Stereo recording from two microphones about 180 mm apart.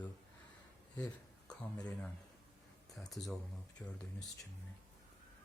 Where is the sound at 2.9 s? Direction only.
Centre (ahead or behind).